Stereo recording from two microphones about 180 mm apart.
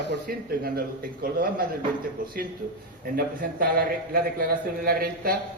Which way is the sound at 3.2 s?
55° right (ahead or behind).